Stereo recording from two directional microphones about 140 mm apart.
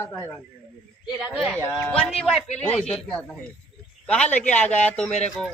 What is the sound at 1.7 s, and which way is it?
Speech, 15° left (ahead or behind).